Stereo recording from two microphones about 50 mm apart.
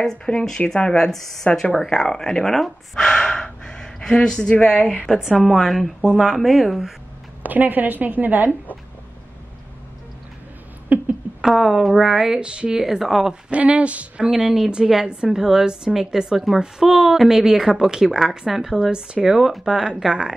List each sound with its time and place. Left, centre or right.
0.0 s speech: centre
3.1 s gasp: centre
5.1 s a woman's voice: centre
6.0 s speech: centre
7.4 s a woman's voice: right
10.9 s a sound: right
11.5 s a woman's voice: centre
12.8 s speech: centre
13.3 s speech: right
14.3 s a woman's voice: centre
18.9 s a woman's voice: centre